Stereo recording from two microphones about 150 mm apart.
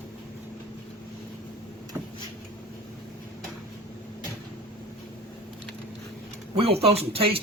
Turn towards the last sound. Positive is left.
turn(degrees=-40)  # may be behind; listen again after turning